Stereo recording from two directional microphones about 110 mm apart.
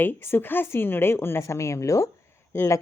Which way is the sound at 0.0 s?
20° left (ahead or behind).